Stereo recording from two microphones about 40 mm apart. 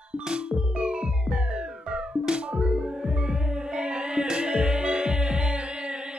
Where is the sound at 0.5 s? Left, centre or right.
Right.